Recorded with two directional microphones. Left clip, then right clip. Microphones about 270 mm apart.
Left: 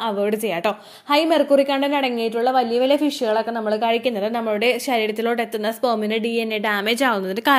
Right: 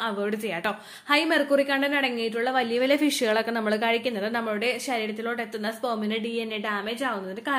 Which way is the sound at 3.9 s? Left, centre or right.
Centre.